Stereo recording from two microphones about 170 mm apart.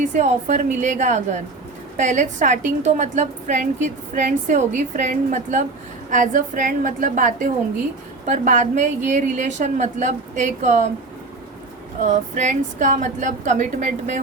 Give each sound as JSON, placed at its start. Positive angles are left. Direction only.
{"t": 0.0, "sound": "a woman's voice", "side_deg": -45}
{"t": 12.0, "sound": "a woman's voice", "side_deg": -45}